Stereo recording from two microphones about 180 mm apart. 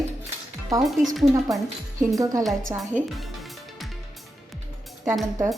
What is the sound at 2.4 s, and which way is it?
Speech, centre (ahead or behind).